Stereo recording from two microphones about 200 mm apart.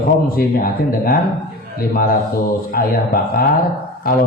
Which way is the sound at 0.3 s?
50° left (ahead or behind).